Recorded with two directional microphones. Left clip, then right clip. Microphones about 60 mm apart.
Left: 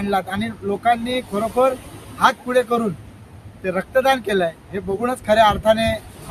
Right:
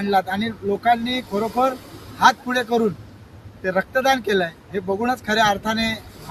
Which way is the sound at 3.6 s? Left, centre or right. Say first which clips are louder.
Left 1 dB; centre.